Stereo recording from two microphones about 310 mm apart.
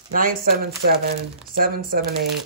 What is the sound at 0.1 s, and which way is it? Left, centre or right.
Speech, right.